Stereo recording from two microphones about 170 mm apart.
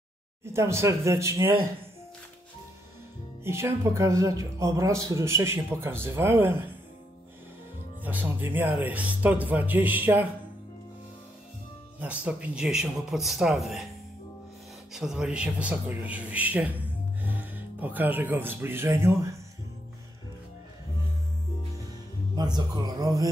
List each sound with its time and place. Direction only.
0.5 s speech: 15° right (ahead or behind)
3.4 s speech: 15° right (ahead or behind)
8.0 s speech: 10° right (ahead or behind)
12.3 s speech: 5° right (ahead or behind)
14.9 s speech: centre (ahead or behind)
22.3 s speech: 25° right (ahead or behind)